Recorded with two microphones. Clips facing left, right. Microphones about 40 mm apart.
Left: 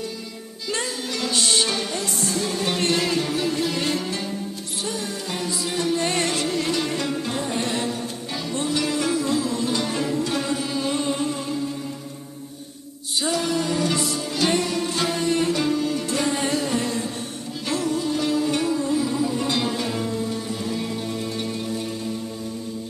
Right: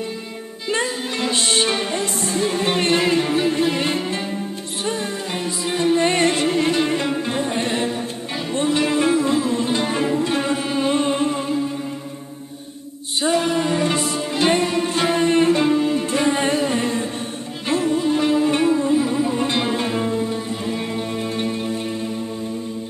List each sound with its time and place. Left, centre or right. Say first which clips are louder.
0.7 s music: right 5 dB; right
13.2 s music: right 5 dB; right